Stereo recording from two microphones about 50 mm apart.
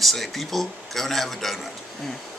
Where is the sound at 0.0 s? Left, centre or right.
Centre.